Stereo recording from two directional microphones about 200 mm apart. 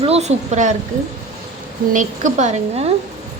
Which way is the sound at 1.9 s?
40° right (ahead or behind).